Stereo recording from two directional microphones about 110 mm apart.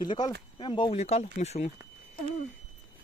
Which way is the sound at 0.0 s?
40° left (ahead or behind).